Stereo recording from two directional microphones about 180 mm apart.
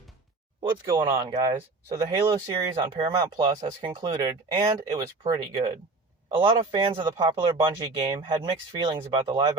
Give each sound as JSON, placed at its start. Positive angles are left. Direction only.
{"t": 0.7, "sound": "speech", "side_deg": -15}